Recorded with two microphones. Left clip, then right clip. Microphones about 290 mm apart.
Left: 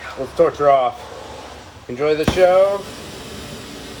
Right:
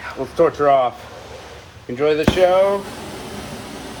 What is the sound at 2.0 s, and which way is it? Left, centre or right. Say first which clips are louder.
Speech: right 1 dB; right.